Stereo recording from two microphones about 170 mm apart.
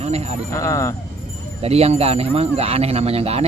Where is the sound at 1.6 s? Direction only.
35° right (ahead or behind).